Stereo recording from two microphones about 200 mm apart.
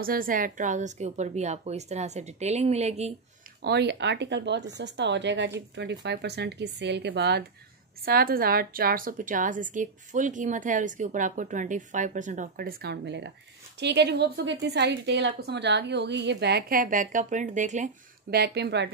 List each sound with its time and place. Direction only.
0.0 s a woman's voice: 45° right (ahead or behind)
3.6 s a woman's voice: 55° right (ahead or behind); by 17.9 s 40° right (ahead or behind)
18.3 s a woman's voice: 55° right (ahead or behind)